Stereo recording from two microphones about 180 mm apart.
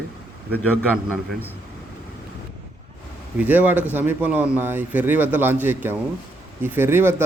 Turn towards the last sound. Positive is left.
turn(degrees=-15)  # may be behind; listen again after turning